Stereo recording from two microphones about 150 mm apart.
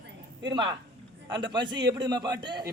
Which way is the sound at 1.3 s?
30° right (ahead or behind).